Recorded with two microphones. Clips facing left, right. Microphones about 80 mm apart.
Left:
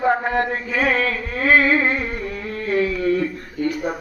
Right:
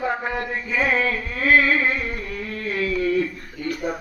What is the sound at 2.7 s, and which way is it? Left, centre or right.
Speech, left.